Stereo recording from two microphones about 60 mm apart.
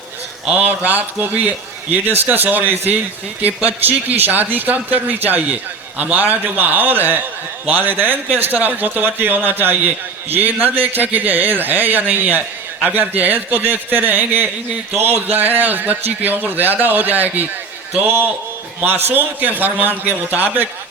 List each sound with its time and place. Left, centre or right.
0.4 s a man's voice: right
18.9 s a man's voice: right